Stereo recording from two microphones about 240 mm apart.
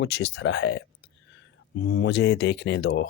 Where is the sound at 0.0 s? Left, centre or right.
Left.